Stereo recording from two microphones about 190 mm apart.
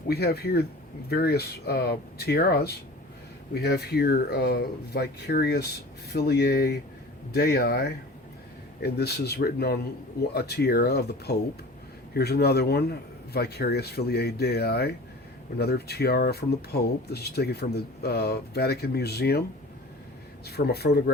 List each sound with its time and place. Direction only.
0.1 s speech: 55° left (ahead or behind)
20.4 s speech: 60° left (ahead or behind)